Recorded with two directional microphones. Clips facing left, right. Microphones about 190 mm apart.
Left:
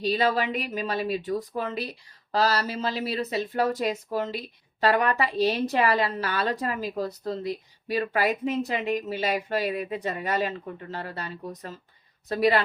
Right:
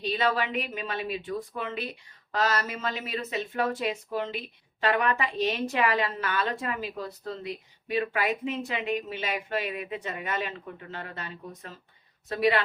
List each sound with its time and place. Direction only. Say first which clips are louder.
0.0 s a woman's voice: left 3 dB; 40° left (ahead or behind)